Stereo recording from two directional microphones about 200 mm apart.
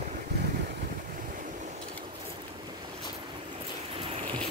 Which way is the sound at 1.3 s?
40° right (ahead or behind).